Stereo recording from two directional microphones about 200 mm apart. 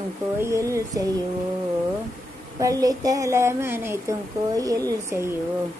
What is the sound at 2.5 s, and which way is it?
A woman's voice, 15° right (ahead or behind).